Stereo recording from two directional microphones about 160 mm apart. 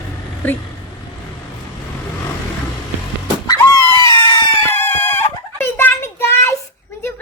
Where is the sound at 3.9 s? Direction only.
15° left (ahead or behind).